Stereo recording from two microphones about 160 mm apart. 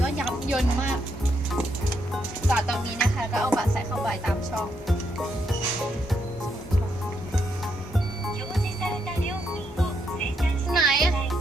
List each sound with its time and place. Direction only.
0.0 s music: 5° right (ahead or behind)
2.5 s music: centre (ahead or behind)
3.5 s speech: centre (ahead or behind)
10.7 s music: centre (ahead or behind)